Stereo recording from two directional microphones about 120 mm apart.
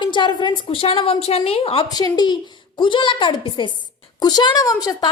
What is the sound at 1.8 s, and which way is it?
A woman's voice, 30° left (ahead or behind).